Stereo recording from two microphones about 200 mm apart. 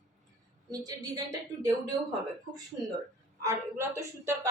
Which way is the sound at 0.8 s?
20° right (ahead or behind).